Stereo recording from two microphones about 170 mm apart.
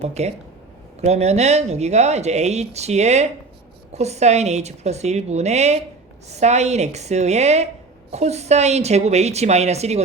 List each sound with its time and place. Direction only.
0.0 s speech: 40° right (ahead or behind)